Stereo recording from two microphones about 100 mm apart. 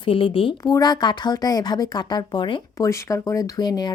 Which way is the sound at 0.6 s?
40° left (ahead or behind).